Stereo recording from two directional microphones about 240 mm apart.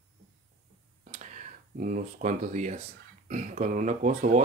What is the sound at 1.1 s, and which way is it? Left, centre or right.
Speech, right.